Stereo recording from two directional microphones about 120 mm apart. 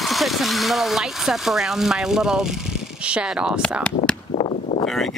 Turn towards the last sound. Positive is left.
turn(degrees=0)  # may be behind; listen again after turning